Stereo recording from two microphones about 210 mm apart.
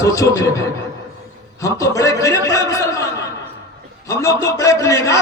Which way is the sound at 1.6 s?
15° left (ahead or behind).